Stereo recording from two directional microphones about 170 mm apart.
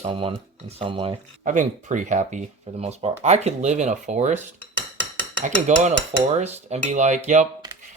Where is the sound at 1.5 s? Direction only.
50° right (ahead or behind).